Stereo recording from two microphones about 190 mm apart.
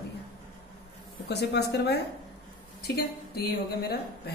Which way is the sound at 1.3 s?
60° left (ahead or behind).